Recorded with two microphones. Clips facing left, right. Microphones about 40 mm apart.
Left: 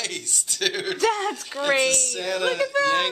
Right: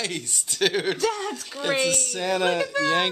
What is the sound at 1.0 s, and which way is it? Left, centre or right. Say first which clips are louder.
Speech: left 3 dB; left.